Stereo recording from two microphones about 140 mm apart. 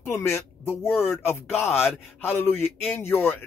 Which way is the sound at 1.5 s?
Centre (ahead or behind).